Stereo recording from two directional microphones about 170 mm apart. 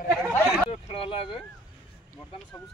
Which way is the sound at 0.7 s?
35° left (ahead or behind).